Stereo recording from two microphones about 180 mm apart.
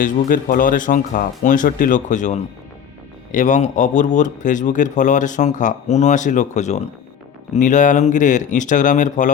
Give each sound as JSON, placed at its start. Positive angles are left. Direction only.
{"t": 0.0, "sound": "a man's voice", "side_deg": 45}